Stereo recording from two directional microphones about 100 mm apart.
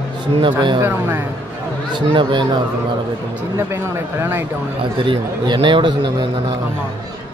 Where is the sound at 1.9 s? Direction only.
50° right (ahead or behind).